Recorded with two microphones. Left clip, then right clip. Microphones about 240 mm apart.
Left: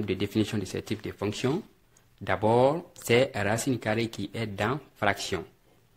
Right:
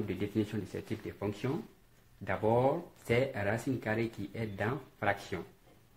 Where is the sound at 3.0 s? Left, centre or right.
Left.